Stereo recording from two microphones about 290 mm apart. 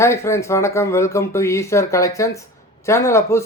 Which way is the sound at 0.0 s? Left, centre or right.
Centre.